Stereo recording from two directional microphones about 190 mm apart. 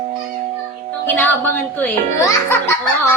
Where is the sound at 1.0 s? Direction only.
10° left (ahead or behind).